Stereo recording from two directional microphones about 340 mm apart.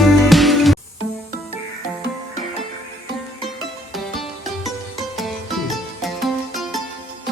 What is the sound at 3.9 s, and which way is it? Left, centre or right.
Music, centre.